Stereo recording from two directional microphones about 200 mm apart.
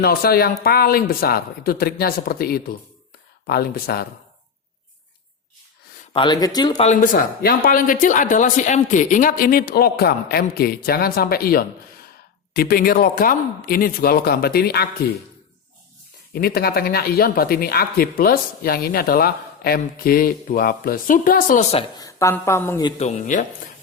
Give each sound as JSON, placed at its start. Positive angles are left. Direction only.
{"t": 0.0, "sound": "speech", "side_deg": 50}
{"t": 6.1, "sound": "speech", "side_deg": 20}
{"t": 6.7, "sound": "speech", "side_deg": 40}
{"t": 16.3, "sound": "speech", "side_deg": 50}
{"t": 21.9, "sound": "speech", "side_deg": 15}
{"t": 23.0, "sound": "speech", "side_deg": 35}